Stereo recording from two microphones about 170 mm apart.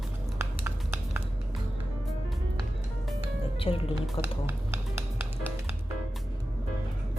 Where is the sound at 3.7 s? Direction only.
35° left (ahead or behind).